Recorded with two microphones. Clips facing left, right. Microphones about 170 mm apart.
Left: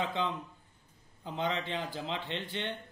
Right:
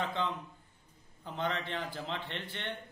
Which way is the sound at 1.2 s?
20° left (ahead or behind).